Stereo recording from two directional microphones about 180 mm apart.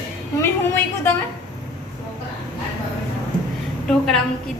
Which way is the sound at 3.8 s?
5° left (ahead or behind).